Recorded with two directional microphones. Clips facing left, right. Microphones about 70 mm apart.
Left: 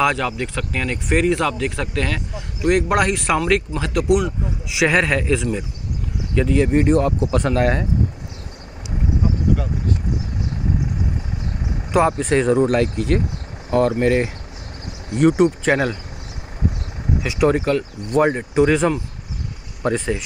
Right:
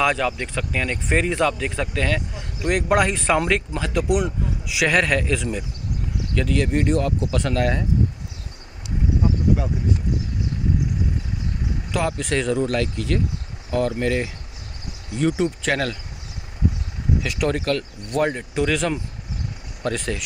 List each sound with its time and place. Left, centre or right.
0.0 s a man's voice: centre
6.3 s speech: centre
6.9 s speech: left
11.9 s speech: left
15.1 s speech: left
15.6 s speech: left
17.4 s speech: centre